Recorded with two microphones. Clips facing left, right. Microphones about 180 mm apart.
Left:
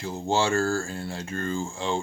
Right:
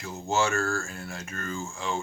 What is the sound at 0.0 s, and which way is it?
Speech, 30° left (ahead or behind).